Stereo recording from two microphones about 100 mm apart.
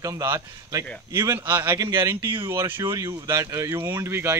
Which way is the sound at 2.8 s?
35° right (ahead or behind).